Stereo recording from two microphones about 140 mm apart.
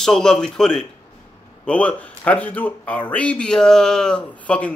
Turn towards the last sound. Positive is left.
turn(degrees=10)  # may be behind; listen again after turning